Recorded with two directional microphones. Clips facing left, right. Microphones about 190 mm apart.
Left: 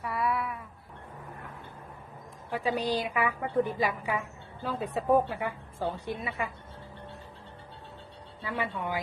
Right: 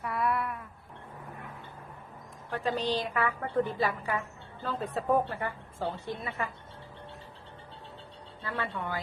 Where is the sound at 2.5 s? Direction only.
10° left (ahead or behind).